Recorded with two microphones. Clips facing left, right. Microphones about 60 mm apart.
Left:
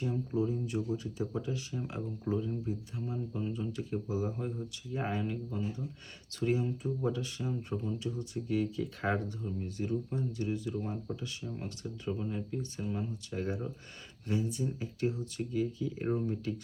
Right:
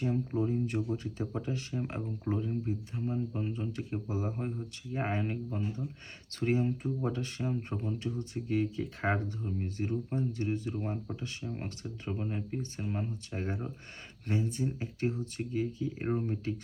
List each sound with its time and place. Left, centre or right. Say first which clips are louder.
0.0 s speech: right 1 dB; right
9.6 s speech: even; right